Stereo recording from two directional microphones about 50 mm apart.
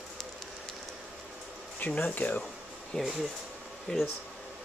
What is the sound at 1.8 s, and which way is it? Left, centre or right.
Speech, left.